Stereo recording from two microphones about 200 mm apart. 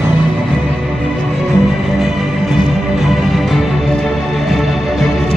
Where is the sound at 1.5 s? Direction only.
Centre (ahead or behind).